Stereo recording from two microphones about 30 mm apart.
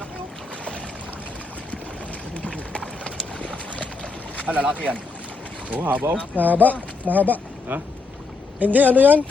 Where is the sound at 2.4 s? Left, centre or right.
Left.